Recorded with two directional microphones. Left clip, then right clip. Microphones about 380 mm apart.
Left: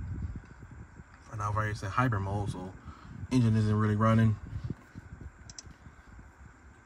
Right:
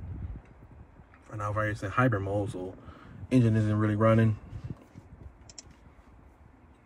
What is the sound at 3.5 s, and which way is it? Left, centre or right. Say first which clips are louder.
Speech: right 2 dB; centre.